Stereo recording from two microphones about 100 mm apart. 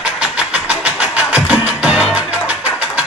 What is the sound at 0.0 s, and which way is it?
Music, 10° right (ahead or behind).